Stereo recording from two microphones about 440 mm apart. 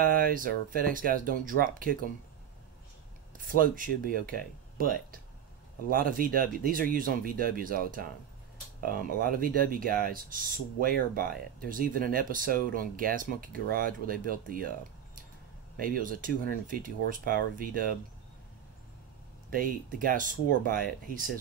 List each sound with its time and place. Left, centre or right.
0.3 s speech: centre
3.3 s speech: centre
15.8 s speech: centre
19.5 s speech: centre